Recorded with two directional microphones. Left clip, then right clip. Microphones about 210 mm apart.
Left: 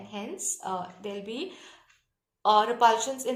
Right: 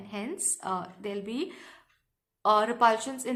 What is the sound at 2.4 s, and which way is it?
Speech, 20° right (ahead or behind).